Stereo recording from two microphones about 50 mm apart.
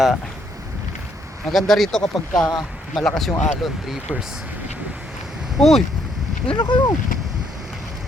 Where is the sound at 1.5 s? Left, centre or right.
Centre.